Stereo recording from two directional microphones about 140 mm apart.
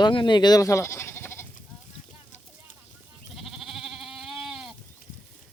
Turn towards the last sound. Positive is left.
turn(degrees=-5)  # may be behind; listen again after turning